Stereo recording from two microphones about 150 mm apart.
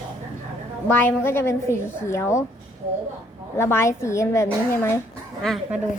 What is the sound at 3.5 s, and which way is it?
A woman's voice, 15° left (ahead or behind).